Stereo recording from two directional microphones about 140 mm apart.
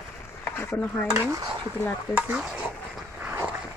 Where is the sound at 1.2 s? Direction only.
20° right (ahead or behind).